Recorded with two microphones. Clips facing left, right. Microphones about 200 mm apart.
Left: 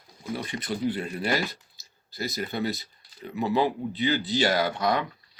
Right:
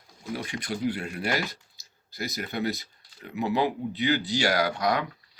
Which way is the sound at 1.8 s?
15° right (ahead or behind).